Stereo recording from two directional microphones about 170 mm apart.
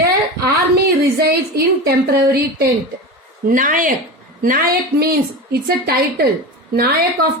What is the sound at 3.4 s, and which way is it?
A woman's voice, 50° right (ahead or behind).